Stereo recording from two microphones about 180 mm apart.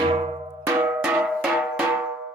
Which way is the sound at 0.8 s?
10° right (ahead or behind).